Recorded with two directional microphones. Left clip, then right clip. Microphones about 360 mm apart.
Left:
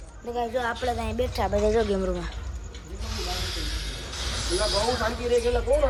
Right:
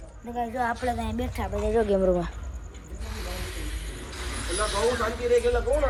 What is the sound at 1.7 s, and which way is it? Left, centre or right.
Speech, centre.